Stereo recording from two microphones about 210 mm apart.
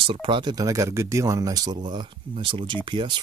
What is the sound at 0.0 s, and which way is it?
Speech, 25° right (ahead or behind).